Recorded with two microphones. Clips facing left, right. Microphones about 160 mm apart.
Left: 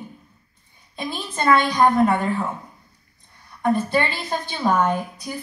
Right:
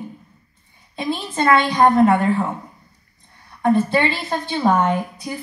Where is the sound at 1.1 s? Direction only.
25° right (ahead or behind).